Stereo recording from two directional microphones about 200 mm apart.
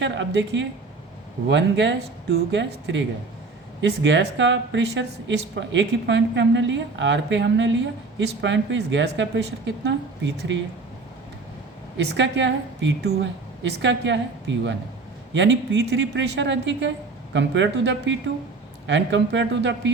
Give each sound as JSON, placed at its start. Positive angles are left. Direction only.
{"t": 0.0, "sound": "a woman's voice", "side_deg": -65}
{"t": 11.9, "sound": "a woman's voice", "side_deg": -65}